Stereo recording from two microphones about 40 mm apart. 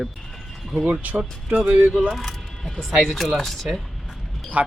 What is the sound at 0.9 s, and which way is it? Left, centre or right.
Speech, right.